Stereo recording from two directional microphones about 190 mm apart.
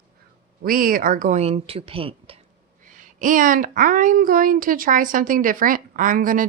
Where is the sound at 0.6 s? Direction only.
50° right (ahead or behind); by 2.4 s 30° right (ahead or behind).